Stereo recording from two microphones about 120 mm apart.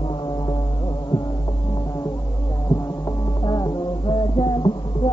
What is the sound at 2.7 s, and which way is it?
Music, 30° left (ahead or behind).